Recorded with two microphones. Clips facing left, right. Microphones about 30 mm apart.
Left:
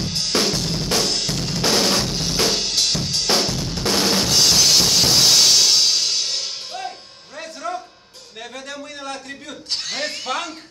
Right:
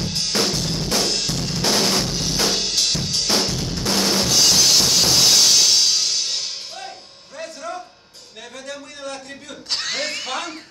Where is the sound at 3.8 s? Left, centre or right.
Centre.